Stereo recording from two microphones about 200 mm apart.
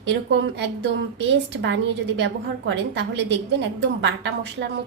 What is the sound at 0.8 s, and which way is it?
Speech, 60° right (ahead or behind).